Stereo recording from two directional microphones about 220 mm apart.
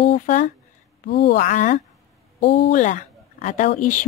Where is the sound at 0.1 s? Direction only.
35° left (ahead or behind).